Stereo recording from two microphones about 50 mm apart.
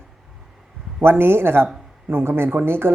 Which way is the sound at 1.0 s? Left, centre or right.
Right.